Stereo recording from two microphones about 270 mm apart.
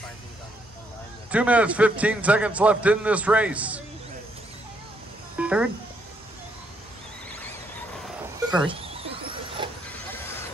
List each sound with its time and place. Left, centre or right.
1.3 s a man's voice: centre
5.4 s speech: centre
8.5 s a sound: centre
10.1 s music: centre